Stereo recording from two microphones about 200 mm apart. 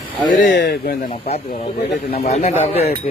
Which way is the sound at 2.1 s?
35° left (ahead or behind).